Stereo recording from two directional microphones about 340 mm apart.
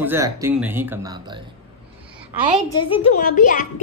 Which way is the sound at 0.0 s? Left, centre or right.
Centre.